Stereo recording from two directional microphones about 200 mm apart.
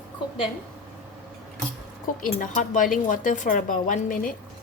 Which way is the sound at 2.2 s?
40° left (ahead or behind).